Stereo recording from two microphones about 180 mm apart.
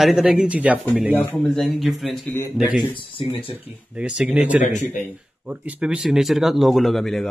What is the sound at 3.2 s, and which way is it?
Speech, 30° left (ahead or behind).